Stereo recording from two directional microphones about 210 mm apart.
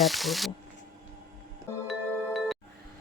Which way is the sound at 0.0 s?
Centre (ahead or behind).